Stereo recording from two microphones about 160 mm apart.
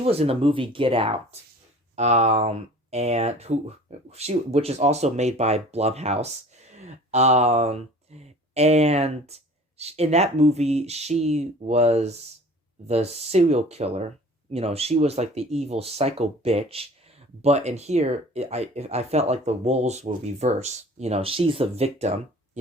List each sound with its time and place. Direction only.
0.0 s speech: 40° right (ahead or behind)